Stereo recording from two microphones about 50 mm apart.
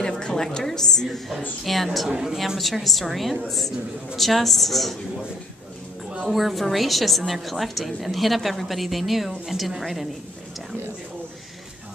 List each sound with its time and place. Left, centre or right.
0.0 s a woman's voice: centre
2.0 s a woman's voice: centre
6.2 s a woman's voice: centre